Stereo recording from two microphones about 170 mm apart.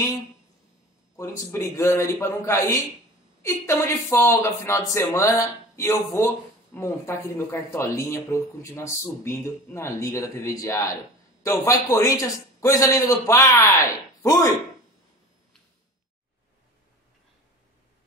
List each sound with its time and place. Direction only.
1.5 s speech: 15° left (ahead or behind)